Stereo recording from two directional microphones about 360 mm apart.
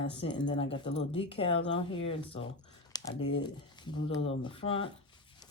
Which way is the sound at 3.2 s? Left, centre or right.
Left.